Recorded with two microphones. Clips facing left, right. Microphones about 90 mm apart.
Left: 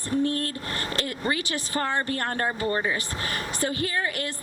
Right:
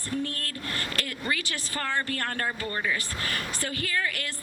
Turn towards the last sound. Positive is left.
turn(degrees=25)  # may be behind; listen again after turning